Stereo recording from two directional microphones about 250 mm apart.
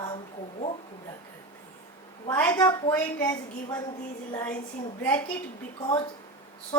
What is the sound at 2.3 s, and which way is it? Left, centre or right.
A woman's voice, centre.